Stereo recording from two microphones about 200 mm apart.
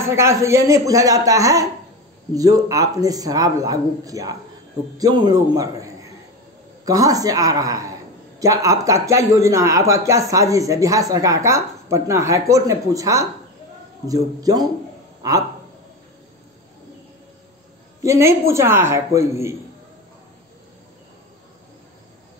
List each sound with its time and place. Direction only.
0.0 s a man's voice: 15° right (ahead or behind)
18.0 s speech: 15° right (ahead or behind)